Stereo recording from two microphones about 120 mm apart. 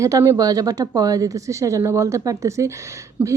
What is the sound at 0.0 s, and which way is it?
Speech, 25° right (ahead or behind).